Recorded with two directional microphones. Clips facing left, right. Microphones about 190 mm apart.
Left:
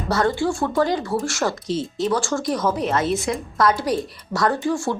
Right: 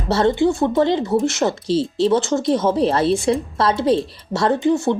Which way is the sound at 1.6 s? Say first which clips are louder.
Right 6 dB; 30° right (ahead or behind).